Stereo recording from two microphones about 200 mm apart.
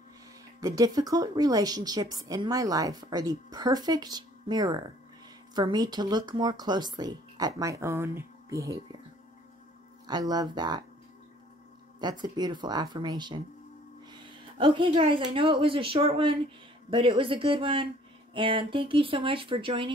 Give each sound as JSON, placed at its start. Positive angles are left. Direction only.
{"t": 0.6, "sound": "a woman's voice", "side_deg": -15}
{"t": 10.0, "sound": "a woman's voice", "side_deg": -20}
{"t": 12.0, "sound": "a woman's voice", "side_deg": -20}